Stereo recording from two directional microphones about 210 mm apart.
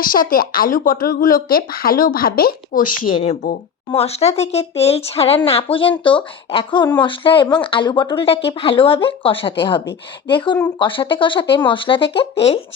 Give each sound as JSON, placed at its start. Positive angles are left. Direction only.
{"t": 0.0, "sound": "speech", "side_deg": 40}
{"t": 3.9, "sound": "speech", "side_deg": 30}